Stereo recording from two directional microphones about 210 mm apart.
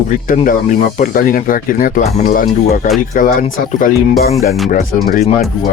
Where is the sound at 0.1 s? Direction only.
40° left (ahead or behind).